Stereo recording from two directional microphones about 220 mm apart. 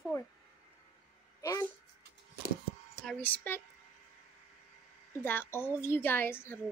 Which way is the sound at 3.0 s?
5° left (ahead or behind).